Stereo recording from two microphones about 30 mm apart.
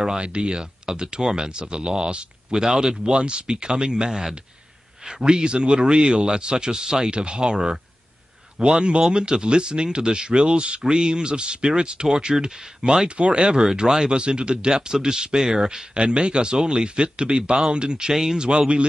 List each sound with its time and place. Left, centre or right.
0.2 s speech: right
2.5 s speech: centre
7.1 s speech: right
13.1 s speech: right
13.8 s speech: centre
14.1 s speech: right
16.0 s speech: right
18.1 s speech: centre